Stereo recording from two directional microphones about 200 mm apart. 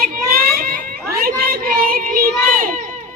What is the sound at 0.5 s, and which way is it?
Cat, 45° right (ahead or behind).